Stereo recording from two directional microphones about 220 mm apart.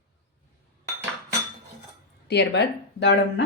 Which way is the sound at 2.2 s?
50° left (ahead or behind).